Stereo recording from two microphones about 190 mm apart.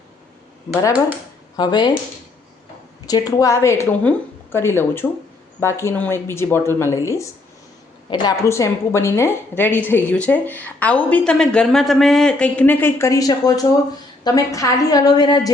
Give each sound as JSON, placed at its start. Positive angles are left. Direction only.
{"t": 1.5, "sound": "a woman's voice", "side_deg": 20}
{"t": 3.1, "sound": "a woman's voice", "side_deg": 20}